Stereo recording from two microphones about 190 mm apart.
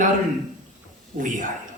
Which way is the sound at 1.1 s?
45° right (ahead or behind).